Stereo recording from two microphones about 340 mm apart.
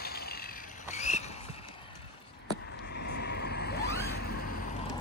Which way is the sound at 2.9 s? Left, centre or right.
Left.